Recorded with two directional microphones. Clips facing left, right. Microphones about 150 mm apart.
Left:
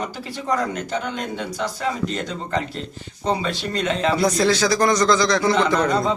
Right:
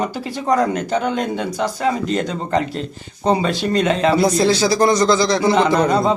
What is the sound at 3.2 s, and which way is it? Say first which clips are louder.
Speech: right 6 dB; 45° right (ahead or behind).